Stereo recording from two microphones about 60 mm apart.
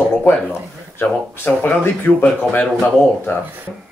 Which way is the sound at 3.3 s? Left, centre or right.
Left.